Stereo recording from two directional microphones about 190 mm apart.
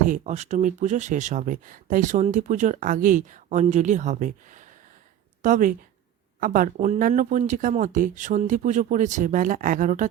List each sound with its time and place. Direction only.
0.0 s speech: 40° right (ahead or behind)